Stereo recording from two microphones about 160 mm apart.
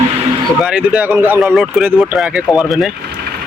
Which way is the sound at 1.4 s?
Centre (ahead or behind).